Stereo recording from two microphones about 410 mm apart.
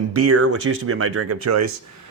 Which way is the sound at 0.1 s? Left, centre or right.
Right.